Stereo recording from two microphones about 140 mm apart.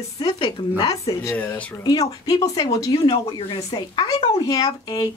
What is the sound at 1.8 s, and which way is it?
Speech, 30° left (ahead or behind).